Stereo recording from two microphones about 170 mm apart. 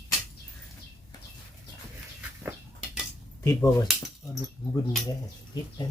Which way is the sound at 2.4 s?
5° right (ahead or behind).